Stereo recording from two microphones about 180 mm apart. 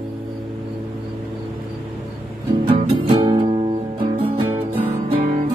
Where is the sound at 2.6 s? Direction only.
30° right (ahead or behind).